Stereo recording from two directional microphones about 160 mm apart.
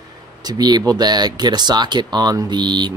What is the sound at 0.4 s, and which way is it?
Speech, 25° right (ahead or behind).